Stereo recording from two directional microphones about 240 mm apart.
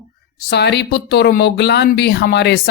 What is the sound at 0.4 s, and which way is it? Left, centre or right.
Speech, left.